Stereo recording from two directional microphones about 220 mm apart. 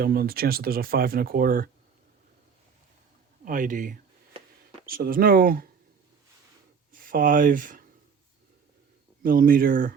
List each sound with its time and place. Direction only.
0.0 s speech: 45° right (ahead or behind)
3.4 s speech: 35° right (ahead or behind)
6.9 s speech: 40° right (ahead or behind)
9.2 s speech: 40° right (ahead or behind)